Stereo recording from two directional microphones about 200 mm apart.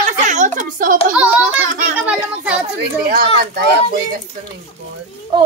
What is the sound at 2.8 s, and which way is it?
Speech, 50° right (ahead or behind).